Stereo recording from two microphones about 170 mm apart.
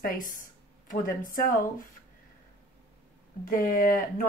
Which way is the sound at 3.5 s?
55° left (ahead or behind).